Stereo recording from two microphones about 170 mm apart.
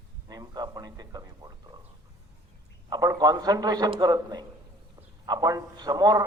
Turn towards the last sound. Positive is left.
turn(degrees=-20)  # may be behind; listen again after turning